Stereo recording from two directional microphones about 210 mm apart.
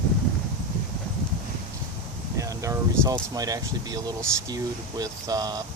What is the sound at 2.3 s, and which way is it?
Speech, 15° right (ahead or behind).